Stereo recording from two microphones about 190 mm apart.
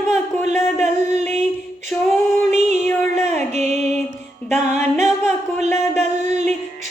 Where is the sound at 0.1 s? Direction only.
35° right (ahead or behind).